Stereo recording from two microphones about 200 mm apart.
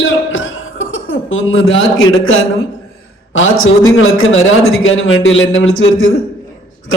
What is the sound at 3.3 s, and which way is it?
A man's voice, 80° left.